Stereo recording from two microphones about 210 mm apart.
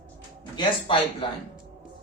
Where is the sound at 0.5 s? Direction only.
20° left (ahead or behind).